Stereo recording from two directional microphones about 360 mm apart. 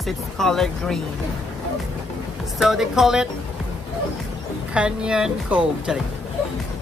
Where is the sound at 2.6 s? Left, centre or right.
Centre.